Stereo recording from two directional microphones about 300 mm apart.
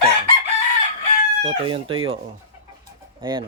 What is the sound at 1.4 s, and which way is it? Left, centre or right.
Speech, centre.